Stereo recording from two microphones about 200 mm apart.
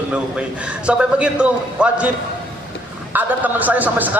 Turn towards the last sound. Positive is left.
turn(degrees=-10)  # may be behind; listen again after turning